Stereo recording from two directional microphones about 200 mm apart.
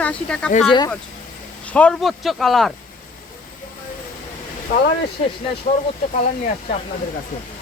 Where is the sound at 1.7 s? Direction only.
5° left (ahead or behind).